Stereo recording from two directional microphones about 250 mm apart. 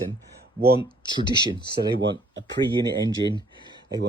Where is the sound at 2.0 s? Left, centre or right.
Right.